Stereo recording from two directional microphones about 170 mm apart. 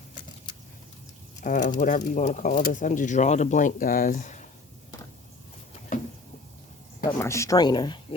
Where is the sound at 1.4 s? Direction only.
50° left (ahead or behind).